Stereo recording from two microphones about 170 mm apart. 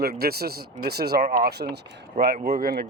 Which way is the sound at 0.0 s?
65° right (ahead or behind).